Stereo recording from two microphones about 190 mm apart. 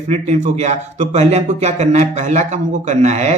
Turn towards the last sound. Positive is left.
turn(degrees=-35)  # may be behind; listen again after turning